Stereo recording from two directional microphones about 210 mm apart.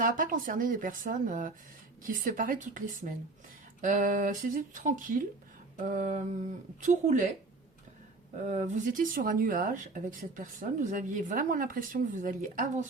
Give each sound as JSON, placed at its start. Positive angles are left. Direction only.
{"t": 0.0, "sound": "speech", "side_deg": -40}
{"t": 8.4, "sound": "speech", "side_deg": -35}